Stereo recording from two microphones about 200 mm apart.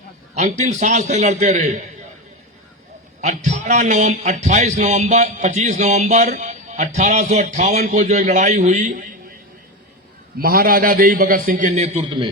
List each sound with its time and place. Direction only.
0.3 s a man's voice: 35° right (ahead or behind)
3.2 s a man's voice: 35° right (ahead or behind)
10.3 s a man's voice: 50° right (ahead or behind); by 12.3 s 25° right (ahead or behind)